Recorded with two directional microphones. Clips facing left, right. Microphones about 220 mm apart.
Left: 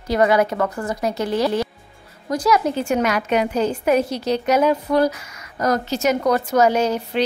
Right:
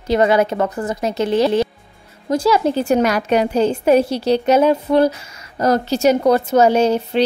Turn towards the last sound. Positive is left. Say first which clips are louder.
# right 4 dB
turn(degrees=-25)  # may be behind; listen again after turning